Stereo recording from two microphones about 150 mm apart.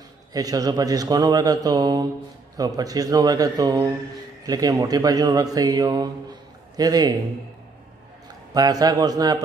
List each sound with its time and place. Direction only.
0.3 s speech: 25° right (ahead or behind)
8.5 s speech: 25° right (ahead or behind)